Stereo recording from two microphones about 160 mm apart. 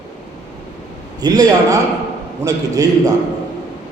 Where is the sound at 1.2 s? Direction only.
25° right (ahead or behind).